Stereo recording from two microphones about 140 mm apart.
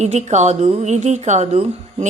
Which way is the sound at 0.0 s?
55° right (ahead or behind).